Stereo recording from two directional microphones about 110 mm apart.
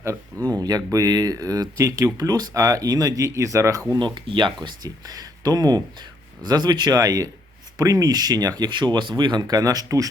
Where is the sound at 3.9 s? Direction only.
45° right (ahead or behind).